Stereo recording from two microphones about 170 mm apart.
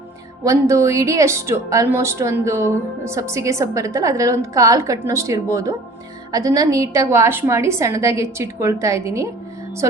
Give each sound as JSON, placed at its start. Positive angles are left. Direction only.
{"t": 0.4, "sound": "speech", "side_deg": -15}